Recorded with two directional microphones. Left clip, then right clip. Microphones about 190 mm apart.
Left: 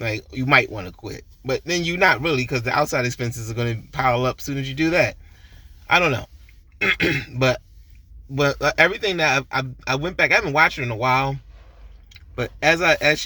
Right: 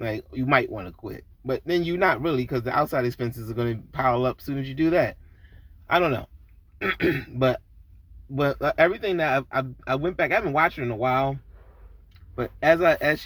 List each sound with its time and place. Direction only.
0.0 s speech: 20° left (ahead or behind)